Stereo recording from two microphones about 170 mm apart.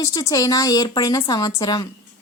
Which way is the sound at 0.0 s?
20° left (ahead or behind).